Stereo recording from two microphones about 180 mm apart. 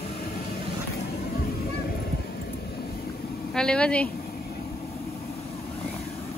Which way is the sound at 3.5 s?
5° left (ahead or behind).